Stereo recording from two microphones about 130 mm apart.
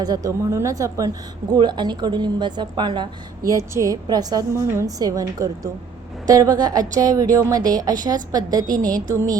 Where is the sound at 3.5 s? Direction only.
25° right (ahead or behind).